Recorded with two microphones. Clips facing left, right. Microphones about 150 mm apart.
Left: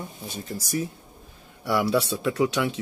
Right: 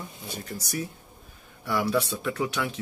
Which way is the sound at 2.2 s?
15° left (ahead or behind).